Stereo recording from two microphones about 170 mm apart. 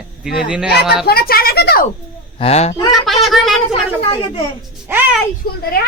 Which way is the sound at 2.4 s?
40° left (ahead or behind).